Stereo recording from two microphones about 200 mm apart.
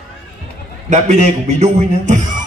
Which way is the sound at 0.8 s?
35° right (ahead or behind).